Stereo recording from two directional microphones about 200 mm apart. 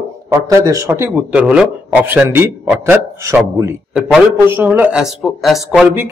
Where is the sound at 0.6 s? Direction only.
15° right (ahead or behind).